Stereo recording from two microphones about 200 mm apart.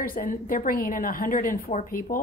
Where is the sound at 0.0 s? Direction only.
45° left (ahead or behind).